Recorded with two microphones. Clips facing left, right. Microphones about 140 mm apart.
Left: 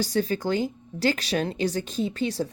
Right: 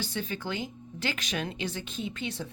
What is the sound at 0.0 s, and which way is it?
A woman's voice, 40° left (ahead or behind).